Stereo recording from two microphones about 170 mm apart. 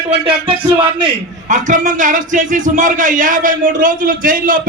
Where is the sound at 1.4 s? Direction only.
50° right (ahead or behind).